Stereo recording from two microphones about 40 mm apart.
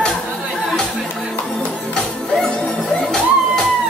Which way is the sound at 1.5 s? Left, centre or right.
Centre.